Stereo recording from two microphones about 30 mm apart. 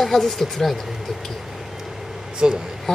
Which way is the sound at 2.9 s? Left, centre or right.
Left.